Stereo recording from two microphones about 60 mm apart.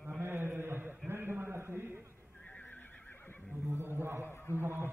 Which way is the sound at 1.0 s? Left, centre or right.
Right.